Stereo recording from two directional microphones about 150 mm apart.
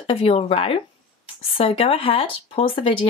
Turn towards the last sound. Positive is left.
turn(degrees=35)  # may be behind; listen again after turning